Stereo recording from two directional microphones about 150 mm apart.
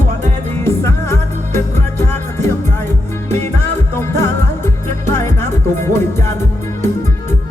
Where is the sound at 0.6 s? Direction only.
15° left (ahead or behind).